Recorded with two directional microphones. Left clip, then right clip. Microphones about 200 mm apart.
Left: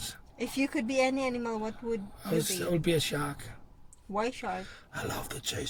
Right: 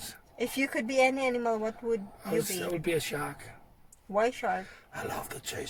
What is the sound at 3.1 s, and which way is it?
Speech, 10° left (ahead or behind).